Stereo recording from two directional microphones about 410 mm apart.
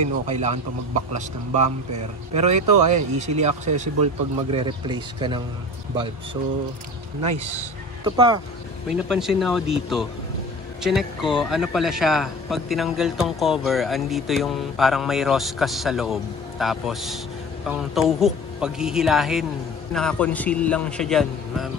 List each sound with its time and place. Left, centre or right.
0.0 s speech: centre
8.0 s a man's voice: centre